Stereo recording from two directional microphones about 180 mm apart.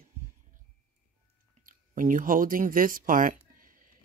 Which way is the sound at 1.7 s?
45° right (ahead or behind).